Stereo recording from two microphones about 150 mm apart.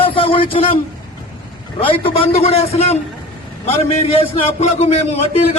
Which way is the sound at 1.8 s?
40° left (ahead or behind).